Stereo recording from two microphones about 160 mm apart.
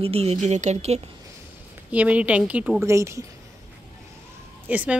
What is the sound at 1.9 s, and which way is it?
Speech, 10° right (ahead or behind).